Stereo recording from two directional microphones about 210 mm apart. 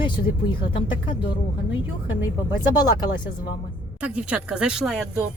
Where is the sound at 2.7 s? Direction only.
20° left (ahead or behind).